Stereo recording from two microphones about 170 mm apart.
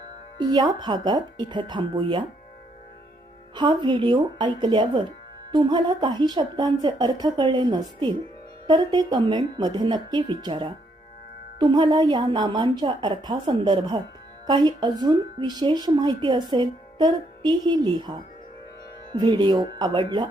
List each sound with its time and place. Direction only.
0.3 s speech: 25° right (ahead or behind)
3.5 s speech: 25° right (ahead or behind)